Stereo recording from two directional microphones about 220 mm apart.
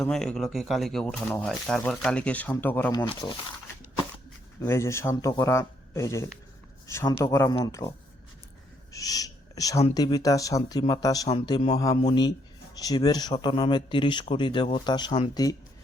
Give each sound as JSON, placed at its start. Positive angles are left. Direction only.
{"t": 0.0, "sound": "speech", "side_deg": 5}
{"t": 4.6, "sound": "speech", "side_deg": 10}